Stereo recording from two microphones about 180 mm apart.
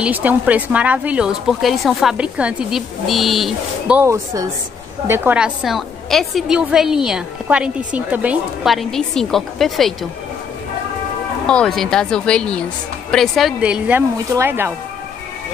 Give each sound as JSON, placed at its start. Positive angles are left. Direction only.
{"t": 0.0, "sound": "a woman's voice", "side_deg": -10}
{"t": 11.4, "sound": "a woman's voice", "side_deg": 5}